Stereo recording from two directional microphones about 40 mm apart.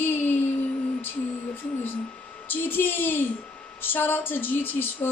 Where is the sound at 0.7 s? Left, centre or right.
Left.